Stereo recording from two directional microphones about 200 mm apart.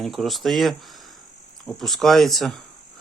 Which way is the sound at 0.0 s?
Centre (ahead or behind).